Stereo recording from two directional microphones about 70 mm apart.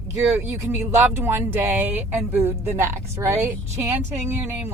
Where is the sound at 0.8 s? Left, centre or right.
Right.